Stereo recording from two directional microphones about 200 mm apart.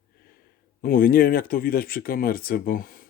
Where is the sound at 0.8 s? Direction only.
45° left (ahead or behind).